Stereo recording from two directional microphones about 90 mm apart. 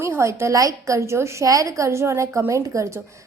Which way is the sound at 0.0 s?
35° right (ahead or behind).